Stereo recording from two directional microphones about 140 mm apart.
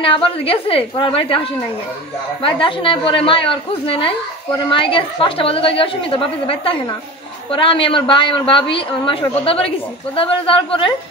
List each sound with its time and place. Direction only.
0.0 s a woman's voice: 40° left (ahead or behind)